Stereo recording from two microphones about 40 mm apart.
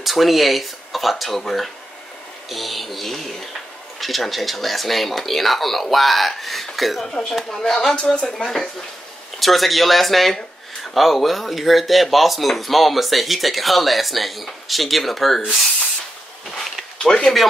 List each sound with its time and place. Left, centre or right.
0.0 s speech: centre
2.5 s speech: centre
7.0 s speech: centre
8.4 s speech: centre
17.0 s speech: centre